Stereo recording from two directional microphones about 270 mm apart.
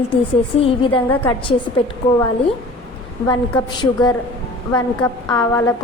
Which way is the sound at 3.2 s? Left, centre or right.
Centre.